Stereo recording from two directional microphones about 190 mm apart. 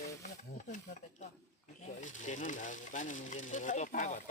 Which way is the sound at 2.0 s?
40° left (ahead or behind).